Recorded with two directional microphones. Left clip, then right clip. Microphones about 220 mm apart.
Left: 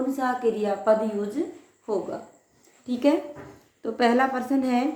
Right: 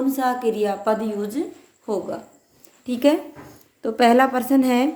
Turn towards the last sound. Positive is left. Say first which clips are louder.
# right 5 dB
turn(degrees=-50)  # may be behind; listen again after turning